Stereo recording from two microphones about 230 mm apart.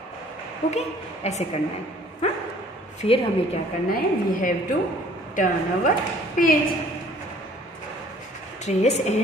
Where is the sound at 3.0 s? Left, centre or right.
Left.